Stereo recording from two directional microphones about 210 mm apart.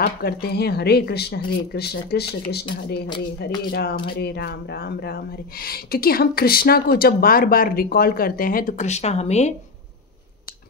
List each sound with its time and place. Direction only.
0.0 s speech: 45° left (ahead or behind); by 9.5 s 30° left (ahead or behind)